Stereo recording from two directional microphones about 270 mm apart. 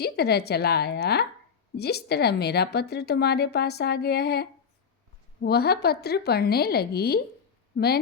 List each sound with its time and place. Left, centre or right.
0.0 s a woman's voice: left